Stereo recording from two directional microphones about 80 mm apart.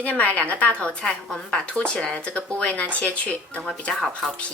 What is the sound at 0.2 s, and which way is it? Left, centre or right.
A woman's voice, centre.